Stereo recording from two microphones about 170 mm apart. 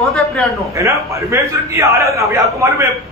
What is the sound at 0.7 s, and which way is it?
A man's voice, 20° right (ahead or behind).